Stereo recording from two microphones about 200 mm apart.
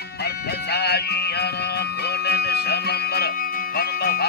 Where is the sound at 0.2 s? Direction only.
55° left (ahead or behind).